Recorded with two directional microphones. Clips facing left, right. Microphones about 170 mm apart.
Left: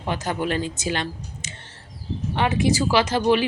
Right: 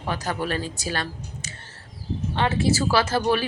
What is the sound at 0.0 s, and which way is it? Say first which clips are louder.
Speech: left 2 dB; 20° left (ahead or behind).